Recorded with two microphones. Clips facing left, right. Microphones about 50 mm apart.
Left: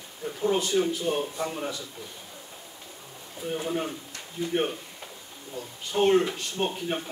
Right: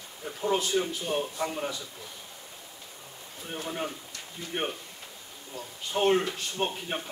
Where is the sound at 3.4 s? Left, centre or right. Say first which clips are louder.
Left 5 dB; centre.